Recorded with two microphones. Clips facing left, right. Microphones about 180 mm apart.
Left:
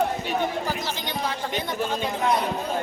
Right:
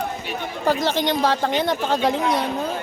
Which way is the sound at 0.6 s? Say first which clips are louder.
Right 9 dB; 70° right (ahead or behind).